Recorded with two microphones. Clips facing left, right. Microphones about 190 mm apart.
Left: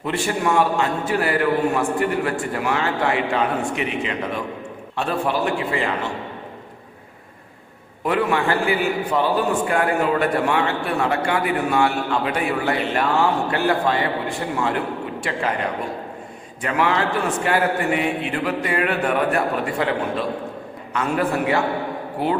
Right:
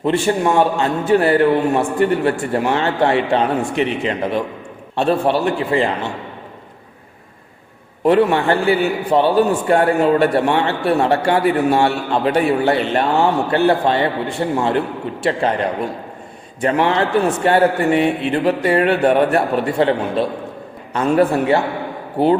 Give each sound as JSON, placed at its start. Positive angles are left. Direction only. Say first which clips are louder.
{"t": 0.0, "sound": "a man's voice", "louder": "right 6 dB", "side_deg": -30}
{"t": 8.0, "sound": "a man's voice", "louder": "right 7 dB", "side_deg": -30}
{"t": 16.6, "sound": "a man's voice", "louder": "right 5 dB", "side_deg": -30}